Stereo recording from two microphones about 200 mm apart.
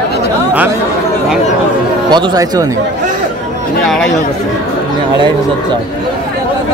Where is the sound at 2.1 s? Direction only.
20° right (ahead or behind).